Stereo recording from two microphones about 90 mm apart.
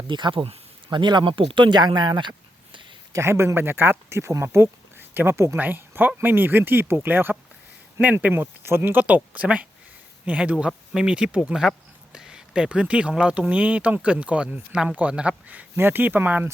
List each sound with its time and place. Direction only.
0.1 s speech: 65° right (ahead or behind)
3.1 s speech: 30° right (ahead or behind)